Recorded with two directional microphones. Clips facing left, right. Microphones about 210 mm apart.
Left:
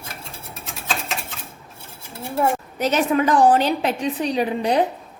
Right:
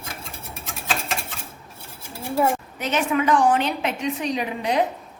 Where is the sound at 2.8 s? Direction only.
40° left (ahead or behind).